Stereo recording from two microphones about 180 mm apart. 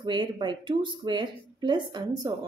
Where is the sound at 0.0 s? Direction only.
25° right (ahead or behind).